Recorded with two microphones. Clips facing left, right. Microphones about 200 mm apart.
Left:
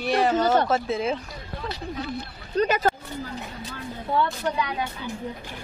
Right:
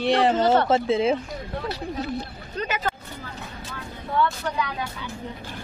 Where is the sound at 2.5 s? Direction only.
40° left (ahead or behind).